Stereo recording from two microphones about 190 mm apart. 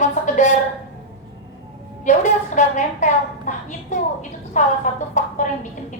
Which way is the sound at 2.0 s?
40° left (ahead or behind).